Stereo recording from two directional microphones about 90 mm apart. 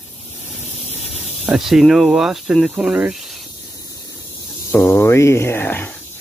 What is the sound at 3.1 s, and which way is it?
Snake, 5° right (ahead or behind).